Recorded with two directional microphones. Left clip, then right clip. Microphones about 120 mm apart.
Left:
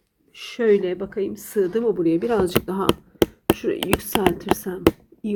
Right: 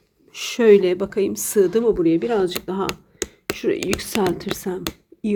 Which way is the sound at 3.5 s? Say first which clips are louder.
Right 1 dB; 15° right (ahead or behind).